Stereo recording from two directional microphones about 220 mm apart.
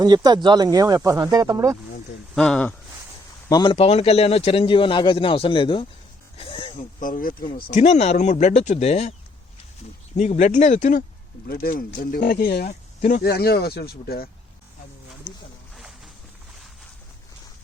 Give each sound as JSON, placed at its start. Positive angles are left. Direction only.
{"t": 0.0, "sound": "speech", "side_deg": -20}
{"t": 2.3, "sound": "speech", "side_deg": 5}
{"t": 3.5, "sound": "speech", "side_deg": 20}
{"t": 6.3, "sound": "throat clearing", "side_deg": 25}
{"t": 6.7, "sound": "speech", "side_deg": 35}
{"t": 10.2, "sound": "speech", "side_deg": 35}